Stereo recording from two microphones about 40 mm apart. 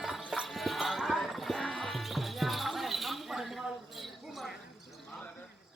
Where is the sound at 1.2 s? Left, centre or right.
Centre.